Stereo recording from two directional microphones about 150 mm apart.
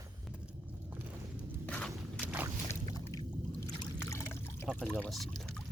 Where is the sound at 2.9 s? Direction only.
25° left (ahead or behind).